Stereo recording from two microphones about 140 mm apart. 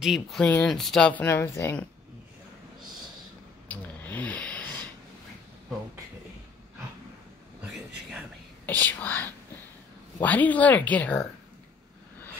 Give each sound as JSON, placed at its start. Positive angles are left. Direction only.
{"t": 0.0, "sound": "speech", "side_deg": 0}
{"t": 1.2, "sound": "speech", "side_deg": 15}
{"t": 3.6, "sound": "a sound", "side_deg": 10}
{"t": 8.6, "sound": "whispering", "side_deg": 10}
{"t": 10.1, "sound": "speech", "side_deg": 10}